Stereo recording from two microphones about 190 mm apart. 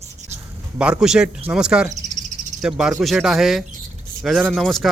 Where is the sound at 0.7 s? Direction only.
5° right (ahead or behind).